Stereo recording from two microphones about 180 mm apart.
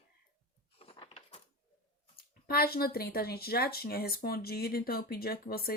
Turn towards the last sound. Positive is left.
turn(degrees=55)  # may be behind; listen again after turning